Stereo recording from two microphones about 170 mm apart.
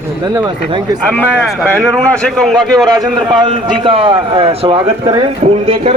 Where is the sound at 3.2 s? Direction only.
25° right (ahead or behind).